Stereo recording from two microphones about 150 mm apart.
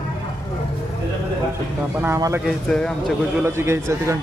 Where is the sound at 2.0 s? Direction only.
20° right (ahead or behind).